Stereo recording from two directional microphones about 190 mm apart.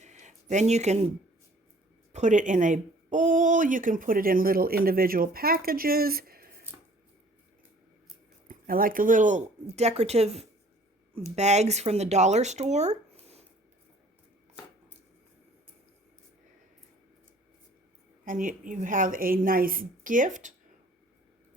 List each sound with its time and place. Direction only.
0.0 s a sound: 40° right (ahead or behind)
2.1 s speech: 40° right (ahead or behind)
8.4 s speech: 50° right (ahead or behind)
18.3 s speech: 45° right (ahead or behind)